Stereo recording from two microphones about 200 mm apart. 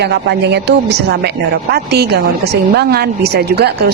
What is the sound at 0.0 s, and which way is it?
A woman's voice, 55° right (ahead or behind).